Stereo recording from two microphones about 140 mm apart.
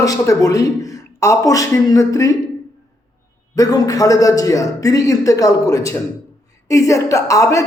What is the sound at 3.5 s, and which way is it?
A man's voice, 25° left (ahead or behind).